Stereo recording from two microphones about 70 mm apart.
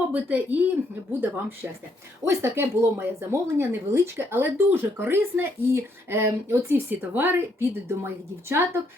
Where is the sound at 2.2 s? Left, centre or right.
Right.